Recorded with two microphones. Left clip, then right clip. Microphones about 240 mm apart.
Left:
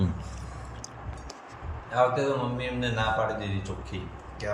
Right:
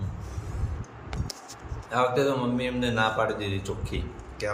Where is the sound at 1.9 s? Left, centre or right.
Centre.